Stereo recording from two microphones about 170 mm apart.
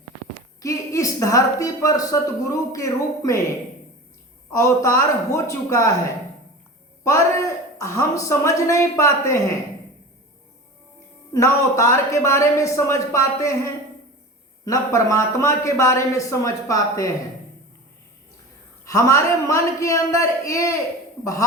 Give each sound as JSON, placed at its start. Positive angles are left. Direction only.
{"t": 0.6, "sound": "a woman's voice", "side_deg": 20}
{"t": 4.5, "sound": "a man's voice", "side_deg": 15}
{"t": 7.0, "sound": "a man's voice", "side_deg": 20}
{"t": 11.3, "sound": "a man's voice", "side_deg": 15}
{"t": 18.9, "sound": "a man's voice", "side_deg": 20}